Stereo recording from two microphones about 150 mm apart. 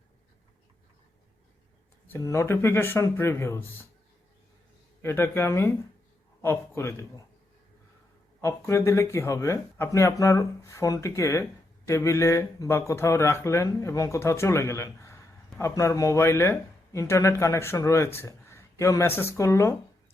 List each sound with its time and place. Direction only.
2.0 s a man's voice: 20° left (ahead or behind)
5.0 s a man's voice: 15° left (ahead or behind)
8.4 s speech: 20° left (ahead or behind)